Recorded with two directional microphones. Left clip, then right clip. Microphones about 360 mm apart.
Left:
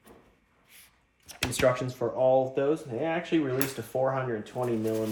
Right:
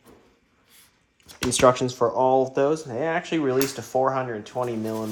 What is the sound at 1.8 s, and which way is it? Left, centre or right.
Speech, centre.